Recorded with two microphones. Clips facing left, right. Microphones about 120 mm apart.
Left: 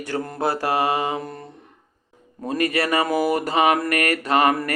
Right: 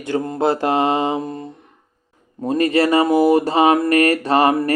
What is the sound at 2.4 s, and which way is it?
Speech, 30° right (ahead or behind).